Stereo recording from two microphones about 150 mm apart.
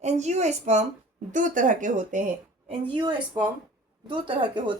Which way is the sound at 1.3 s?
60° right (ahead or behind).